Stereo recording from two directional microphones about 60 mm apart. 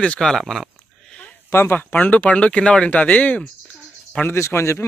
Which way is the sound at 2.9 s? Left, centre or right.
Left.